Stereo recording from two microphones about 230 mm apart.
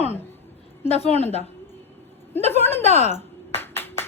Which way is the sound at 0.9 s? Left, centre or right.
Left.